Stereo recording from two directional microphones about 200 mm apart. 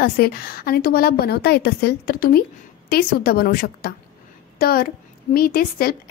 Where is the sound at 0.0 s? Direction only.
50° left (ahead or behind).